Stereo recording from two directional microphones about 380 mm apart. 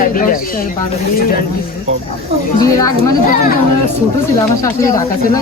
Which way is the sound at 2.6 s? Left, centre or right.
Centre.